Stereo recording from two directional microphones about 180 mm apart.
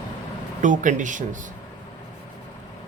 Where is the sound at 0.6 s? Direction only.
45° right (ahead or behind).